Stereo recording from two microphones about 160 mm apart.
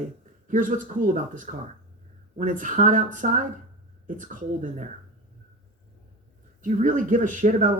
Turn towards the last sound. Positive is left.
turn(degrees=-50)  # may be behind; listen again after turning